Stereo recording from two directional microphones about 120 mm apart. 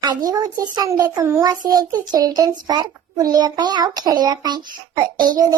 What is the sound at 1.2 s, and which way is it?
Child singing, 20° right (ahead or behind).